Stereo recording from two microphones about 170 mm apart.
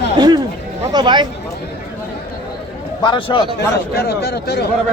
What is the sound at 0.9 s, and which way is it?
Speech, 25° right (ahead or behind).